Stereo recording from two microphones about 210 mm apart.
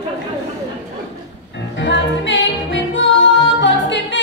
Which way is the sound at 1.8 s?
60° left (ahead or behind).